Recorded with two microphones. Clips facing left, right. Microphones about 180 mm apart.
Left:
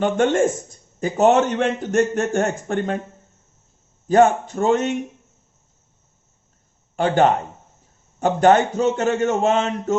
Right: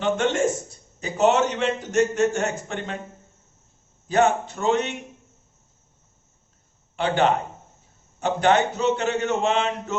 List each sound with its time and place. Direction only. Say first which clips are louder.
0.0 s a man's voice: left 4 dB; 50° left (ahead or behind)
4.1 s a man's voice: left 5 dB; 45° left (ahead or behind)
6.9 s a man's voice: left 4 dB; 45° left (ahead or behind)